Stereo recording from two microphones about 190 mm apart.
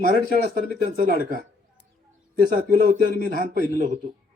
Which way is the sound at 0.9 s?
45° right (ahead or behind).